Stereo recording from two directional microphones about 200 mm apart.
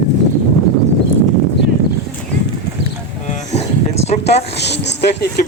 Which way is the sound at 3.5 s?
30° left (ahead or behind).